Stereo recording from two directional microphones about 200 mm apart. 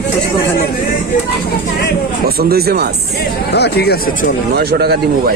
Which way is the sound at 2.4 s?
50° right (ahead or behind).